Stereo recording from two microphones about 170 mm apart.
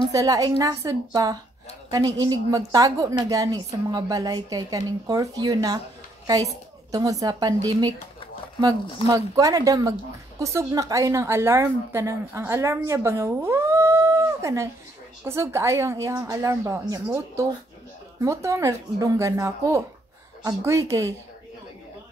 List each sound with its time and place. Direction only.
0.1 s a woman's voice: 20° right (ahead or behind)
9.0 s a woman's voice: 20° right (ahead or behind)